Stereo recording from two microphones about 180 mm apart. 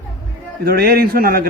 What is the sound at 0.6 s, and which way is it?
Speech, 55° right (ahead or behind).